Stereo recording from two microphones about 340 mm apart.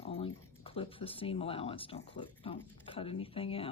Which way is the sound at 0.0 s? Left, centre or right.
Centre.